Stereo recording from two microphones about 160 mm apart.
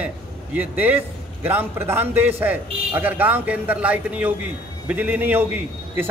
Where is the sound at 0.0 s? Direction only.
10° right (ahead or behind).